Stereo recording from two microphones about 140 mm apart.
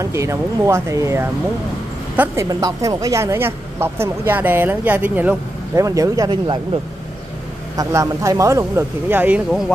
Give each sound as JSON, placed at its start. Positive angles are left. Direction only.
{"t": 0.0, "sound": "a woman's voice", "side_deg": -20}
{"t": 5.8, "sound": "speech", "side_deg": -25}
{"t": 7.7, "sound": "speech", "side_deg": -25}